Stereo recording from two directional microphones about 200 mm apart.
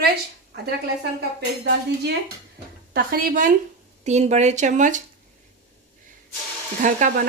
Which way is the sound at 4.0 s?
35° right (ahead or behind).